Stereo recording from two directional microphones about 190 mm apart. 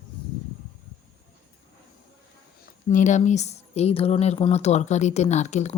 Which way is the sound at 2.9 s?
40° left (ahead or behind).